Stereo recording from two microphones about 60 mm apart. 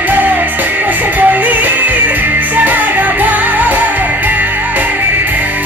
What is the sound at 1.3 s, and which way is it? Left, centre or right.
Music, right.